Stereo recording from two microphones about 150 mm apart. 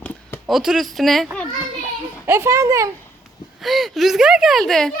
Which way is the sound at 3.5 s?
Centre (ahead or behind).